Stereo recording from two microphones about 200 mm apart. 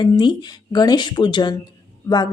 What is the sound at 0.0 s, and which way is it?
A woman's voice, 20° left (ahead or behind).